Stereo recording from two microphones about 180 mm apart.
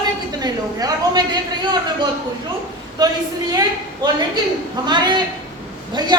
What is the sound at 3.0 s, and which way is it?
A woman's voice, 20° right (ahead or behind).